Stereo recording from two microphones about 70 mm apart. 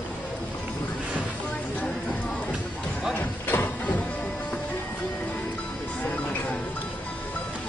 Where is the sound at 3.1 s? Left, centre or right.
Left.